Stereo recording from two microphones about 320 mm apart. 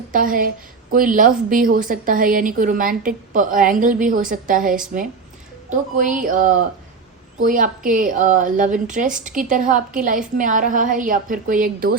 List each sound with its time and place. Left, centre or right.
0.1 s a woman's voice: right